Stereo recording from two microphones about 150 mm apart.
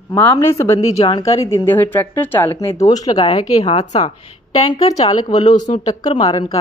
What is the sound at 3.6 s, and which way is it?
Speech, 45° left (ahead or behind).